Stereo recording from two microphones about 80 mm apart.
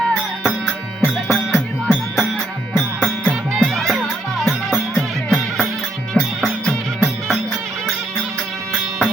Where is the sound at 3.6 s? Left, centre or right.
Centre.